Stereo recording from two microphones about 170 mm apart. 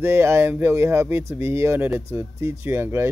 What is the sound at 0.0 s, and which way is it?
Speech, 15° right (ahead or behind).